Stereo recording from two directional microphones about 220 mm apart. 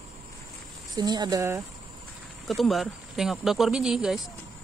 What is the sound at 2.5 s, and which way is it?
Speech, centre (ahead or behind).